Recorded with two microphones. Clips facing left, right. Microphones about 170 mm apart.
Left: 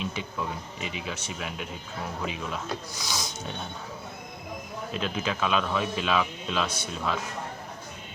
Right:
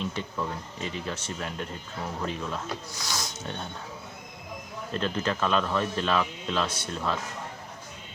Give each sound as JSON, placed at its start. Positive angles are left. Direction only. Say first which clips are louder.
{"t": 0.0, "sound": "speech", "louder": "right 1 dB", "side_deg": 10}
{"t": 4.9, "sound": "speech", "louder": "right 2 dB", "side_deg": 10}